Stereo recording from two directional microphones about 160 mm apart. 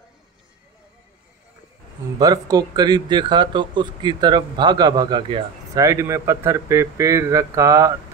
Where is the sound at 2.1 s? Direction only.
25° right (ahead or behind).